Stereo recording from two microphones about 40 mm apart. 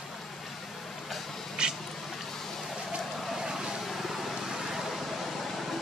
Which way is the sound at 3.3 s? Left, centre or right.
Centre.